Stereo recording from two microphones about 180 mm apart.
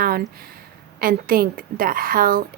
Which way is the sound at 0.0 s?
55° right (ahead or behind).